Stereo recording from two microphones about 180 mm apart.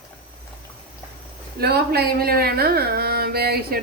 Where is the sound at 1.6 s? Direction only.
60° right (ahead or behind).